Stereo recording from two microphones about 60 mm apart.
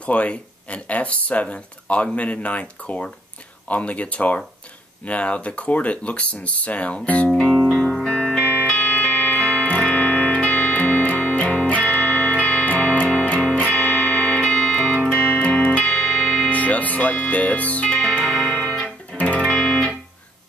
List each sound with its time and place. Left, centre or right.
0.0 s speech: left
7.3 s music: centre
8.7 s music: left
9.4 s music: left
13.7 s music: left
14.5 s music: centre
15.4 s music: left
18.2 s music: centre
19.1 s music: left
19.5 s music: centre